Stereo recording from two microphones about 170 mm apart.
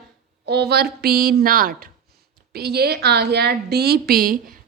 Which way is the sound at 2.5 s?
70° right (ahead or behind).